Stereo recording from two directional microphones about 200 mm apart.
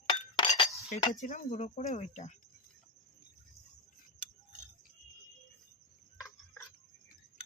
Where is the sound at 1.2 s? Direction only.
40° left (ahead or behind).